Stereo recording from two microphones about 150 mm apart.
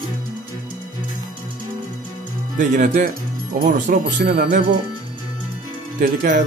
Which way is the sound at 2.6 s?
65° right (ahead or behind).